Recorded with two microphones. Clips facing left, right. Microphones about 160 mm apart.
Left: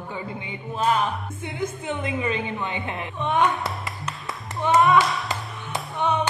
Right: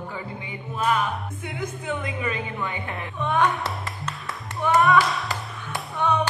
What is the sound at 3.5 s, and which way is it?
Clapping, centre (ahead or behind).